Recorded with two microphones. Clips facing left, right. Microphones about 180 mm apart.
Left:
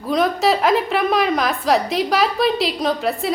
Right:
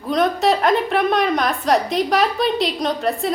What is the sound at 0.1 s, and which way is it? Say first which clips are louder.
A woman's voice: even; centre (ahead or behind).